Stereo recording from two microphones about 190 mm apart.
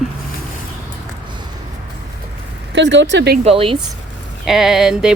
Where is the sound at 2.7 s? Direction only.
70° right (ahead or behind).